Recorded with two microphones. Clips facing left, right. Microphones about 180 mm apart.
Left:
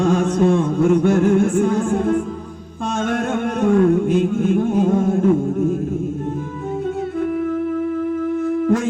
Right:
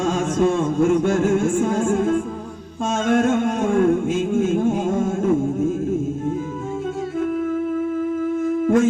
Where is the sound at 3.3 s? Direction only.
60° left (ahead or behind).